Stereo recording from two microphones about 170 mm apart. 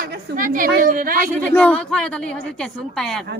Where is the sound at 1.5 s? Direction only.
5° left (ahead or behind).